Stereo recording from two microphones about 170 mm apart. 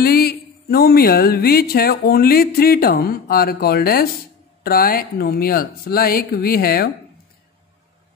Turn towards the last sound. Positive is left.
turn(degrees=60)  # may be behind; listen again after turning